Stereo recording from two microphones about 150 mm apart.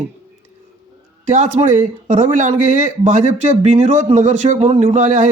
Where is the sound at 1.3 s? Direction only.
55° right (ahead or behind).